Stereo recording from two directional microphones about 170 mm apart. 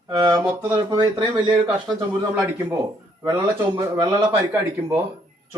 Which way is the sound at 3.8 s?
25° right (ahead or behind).